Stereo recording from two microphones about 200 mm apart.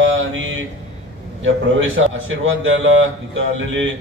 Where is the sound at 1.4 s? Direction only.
75° right (ahead or behind).